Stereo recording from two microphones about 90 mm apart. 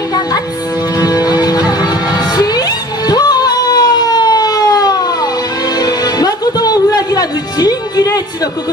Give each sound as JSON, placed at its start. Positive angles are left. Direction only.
{"t": 0.9, "sound": "music", "side_deg": 45}